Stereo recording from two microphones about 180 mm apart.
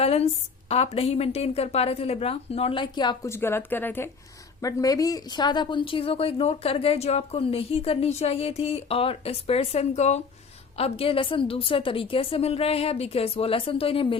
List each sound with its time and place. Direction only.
0.0 s a woman's voice: 35° left (ahead or behind)